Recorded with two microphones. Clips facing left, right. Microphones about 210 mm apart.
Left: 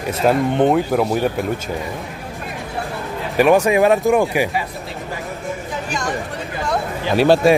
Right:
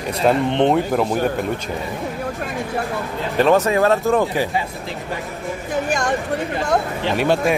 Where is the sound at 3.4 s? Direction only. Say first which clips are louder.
Left 2 dB; 15° left (ahead or behind).